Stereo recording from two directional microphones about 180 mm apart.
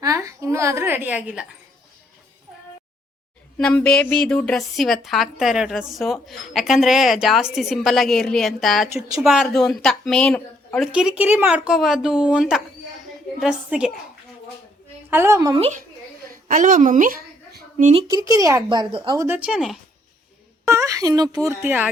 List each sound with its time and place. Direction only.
0.0 s a sound: 20° right (ahead or behind)
3.6 s a woman's voice: 5° left (ahead or behind)
10.9 s a woman's voice: 5° right (ahead or behind)
15.1 s speech: 15° right (ahead or behind)
15.5 s speech: 35° right (ahead or behind)
16.3 s a woman's voice: 50° right (ahead or behind)
17.5 s a sound: 45° right (ahead or behind)
17.9 s speech: 20° right (ahead or behind)
19.2 s a woman's voice: 10° right (ahead or behind)
20.7 s speech: 15° right (ahead or behind)